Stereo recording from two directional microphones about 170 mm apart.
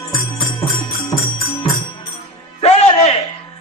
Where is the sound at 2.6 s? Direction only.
40° left (ahead or behind).